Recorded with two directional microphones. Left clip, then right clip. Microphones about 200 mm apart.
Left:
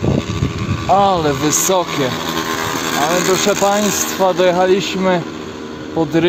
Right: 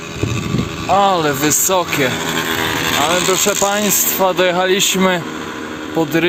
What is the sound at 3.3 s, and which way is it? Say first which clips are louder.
Speech: left 1 dB; centre (ahead or behind).